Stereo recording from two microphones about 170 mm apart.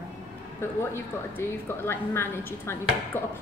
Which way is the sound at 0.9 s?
15° left (ahead or behind).